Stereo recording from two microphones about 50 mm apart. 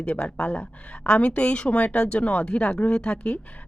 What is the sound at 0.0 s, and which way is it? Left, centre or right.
A woman's voice, left.